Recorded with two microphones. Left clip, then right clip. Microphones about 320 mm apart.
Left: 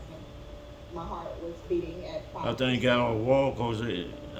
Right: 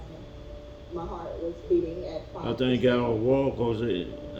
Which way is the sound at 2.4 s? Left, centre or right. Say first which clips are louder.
Right 2 dB; left.